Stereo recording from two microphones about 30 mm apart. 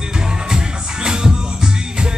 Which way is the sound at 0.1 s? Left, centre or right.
Right.